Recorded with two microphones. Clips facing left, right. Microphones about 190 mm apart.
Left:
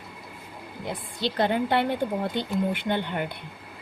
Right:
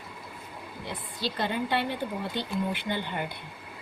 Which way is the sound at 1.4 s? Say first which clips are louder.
Left 6 dB; 55° left (ahead or behind).